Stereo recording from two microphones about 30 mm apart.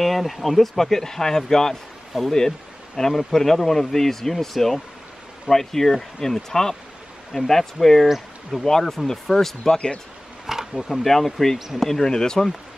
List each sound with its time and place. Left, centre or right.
0.0 s speech: centre
2.1 s speech: centre
3.0 s speech: centre
8.1 s speech: centre
8.6 s speech: centre
10.4 s camera: centre
11.1 s speech: centre
11.5 s speech: centre
11.8 s speech: centre